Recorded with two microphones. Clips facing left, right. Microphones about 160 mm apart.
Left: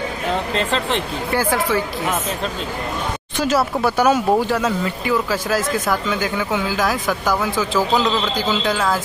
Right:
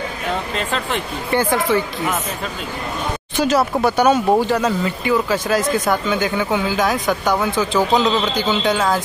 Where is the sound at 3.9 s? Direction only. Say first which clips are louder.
Right 1 dB; 5° left (ahead or behind).